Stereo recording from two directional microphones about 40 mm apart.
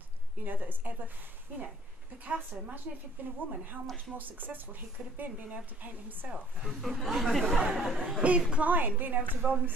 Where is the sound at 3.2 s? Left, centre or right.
Right.